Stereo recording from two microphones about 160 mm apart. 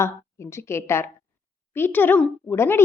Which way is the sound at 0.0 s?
15° left (ahead or behind).